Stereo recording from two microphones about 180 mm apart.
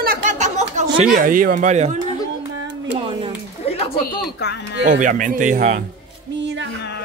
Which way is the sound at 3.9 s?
65° left (ahead or behind).